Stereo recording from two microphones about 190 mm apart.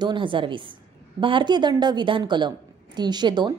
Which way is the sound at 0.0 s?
25° right (ahead or behind).